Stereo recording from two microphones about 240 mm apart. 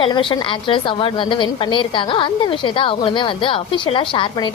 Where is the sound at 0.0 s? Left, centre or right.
Centre.